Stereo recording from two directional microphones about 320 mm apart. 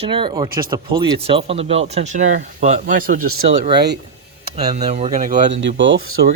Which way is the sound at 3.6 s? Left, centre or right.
Right.